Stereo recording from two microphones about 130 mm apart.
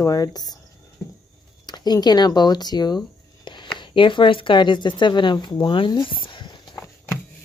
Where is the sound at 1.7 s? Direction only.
30° left (ahead or behind).